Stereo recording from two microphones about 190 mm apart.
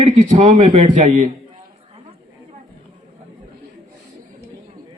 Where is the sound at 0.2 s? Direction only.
30° right (ahead or behind).